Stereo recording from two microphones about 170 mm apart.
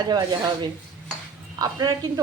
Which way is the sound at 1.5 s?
20° right (ahead or behind).